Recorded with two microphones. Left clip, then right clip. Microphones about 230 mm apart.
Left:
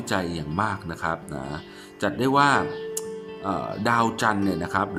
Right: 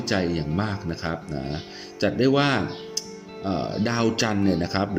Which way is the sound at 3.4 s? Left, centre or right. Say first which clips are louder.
Left 2 dB; centre.